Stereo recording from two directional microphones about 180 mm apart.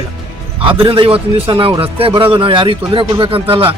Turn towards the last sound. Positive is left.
turn(degrees=-30)  # may be behind; listen again after turning